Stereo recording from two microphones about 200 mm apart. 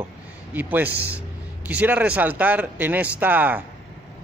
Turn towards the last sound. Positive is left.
turn(degrees=-10)  # may be behind; listen again after turning